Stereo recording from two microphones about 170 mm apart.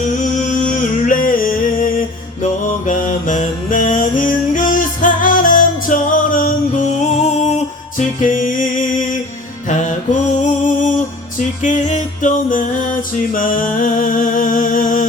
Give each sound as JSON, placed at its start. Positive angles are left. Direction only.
{"t": 0.2, "sound": "a sound", "side_deg": 50}
{"t": 7.9, "sound": "music", "side_deg": 50}
{"t": 9.6, "sound": "music", "side_deg": 45}